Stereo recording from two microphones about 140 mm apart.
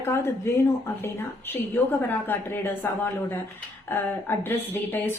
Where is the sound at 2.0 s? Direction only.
15° left (ahead or behind).